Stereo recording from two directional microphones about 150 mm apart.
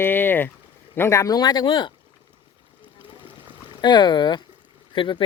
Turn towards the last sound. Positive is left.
turn(degrees=30)  # may be behind; listen again after turning